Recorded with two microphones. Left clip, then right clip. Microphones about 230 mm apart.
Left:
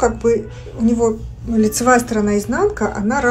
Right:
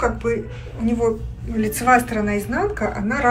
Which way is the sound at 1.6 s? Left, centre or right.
Left.